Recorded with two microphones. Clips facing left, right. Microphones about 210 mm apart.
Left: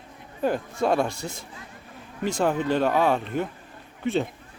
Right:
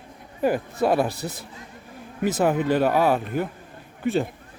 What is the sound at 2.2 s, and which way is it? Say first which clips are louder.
Speech: right 3 dB; 5° right (ahead or behind).